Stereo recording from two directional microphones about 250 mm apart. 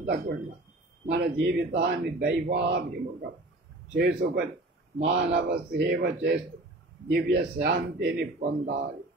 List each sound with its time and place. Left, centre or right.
1.0 s a man's voice: right